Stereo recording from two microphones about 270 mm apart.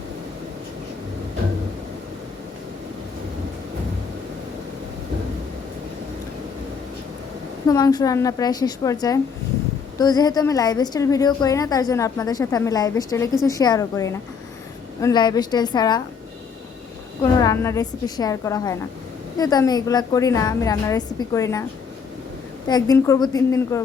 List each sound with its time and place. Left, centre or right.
7.7 s a woman's voice: centre
17.4 s a woman's voice: centre
22.7 s a woman's voice: centre